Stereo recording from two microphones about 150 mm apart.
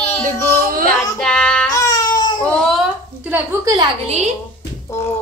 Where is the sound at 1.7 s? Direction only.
25° left (ahead or behind).